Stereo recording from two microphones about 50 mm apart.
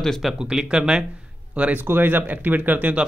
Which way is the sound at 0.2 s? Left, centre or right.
Centre.